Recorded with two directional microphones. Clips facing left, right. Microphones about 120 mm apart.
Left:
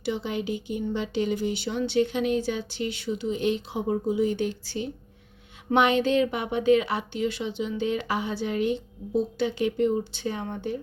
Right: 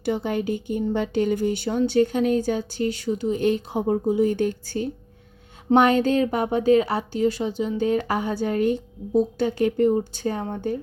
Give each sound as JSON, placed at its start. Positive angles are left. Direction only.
{"t": 0.0, "sound": "speech", "side_deg": -50}